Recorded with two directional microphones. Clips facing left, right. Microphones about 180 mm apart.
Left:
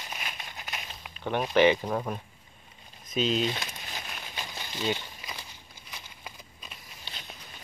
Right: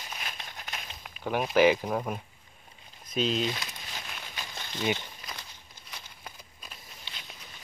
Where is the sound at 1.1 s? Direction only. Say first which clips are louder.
Even; 5° right (ahead or behind).